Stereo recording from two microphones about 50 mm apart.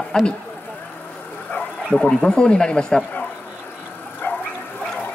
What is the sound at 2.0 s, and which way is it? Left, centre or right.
Speech, centre.